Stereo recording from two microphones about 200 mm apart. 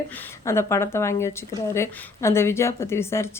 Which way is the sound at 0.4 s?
15° left (ahead or behind).